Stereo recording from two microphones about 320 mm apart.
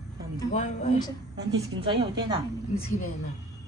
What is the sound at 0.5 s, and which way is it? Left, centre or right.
Speech, left.